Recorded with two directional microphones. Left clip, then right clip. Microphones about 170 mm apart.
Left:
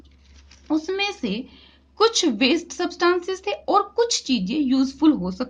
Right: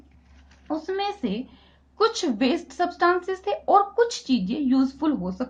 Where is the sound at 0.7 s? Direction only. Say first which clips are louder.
Left 3 dB; 30° left (ahead or behind).